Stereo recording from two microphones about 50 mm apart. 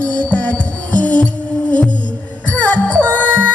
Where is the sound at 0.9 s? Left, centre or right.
Left.